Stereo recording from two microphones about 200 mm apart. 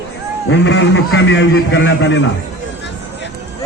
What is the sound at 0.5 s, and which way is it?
A man's voice, 65° left (ahead or behind).